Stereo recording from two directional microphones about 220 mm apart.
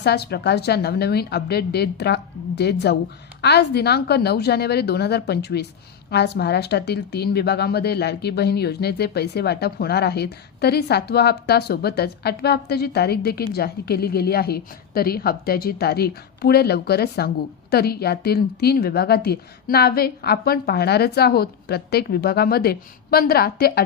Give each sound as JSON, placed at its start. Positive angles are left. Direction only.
{"t": 0.0, "sound": "a woman's voice", "side_deg": 50}